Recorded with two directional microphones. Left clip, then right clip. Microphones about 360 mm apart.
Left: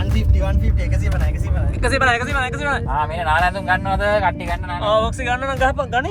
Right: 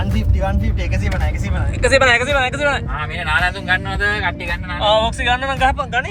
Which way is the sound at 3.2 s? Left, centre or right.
Left.